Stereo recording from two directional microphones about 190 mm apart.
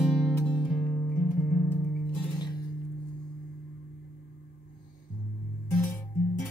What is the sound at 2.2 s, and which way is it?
Music, 25° left (ahead or behind).